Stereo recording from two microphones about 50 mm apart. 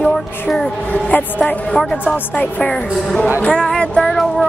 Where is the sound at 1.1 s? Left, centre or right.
Left.